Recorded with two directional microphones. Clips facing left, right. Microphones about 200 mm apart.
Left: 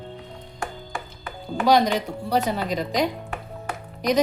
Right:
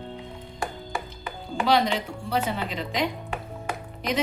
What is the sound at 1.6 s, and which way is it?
Speech, 45° left (ahead or behind).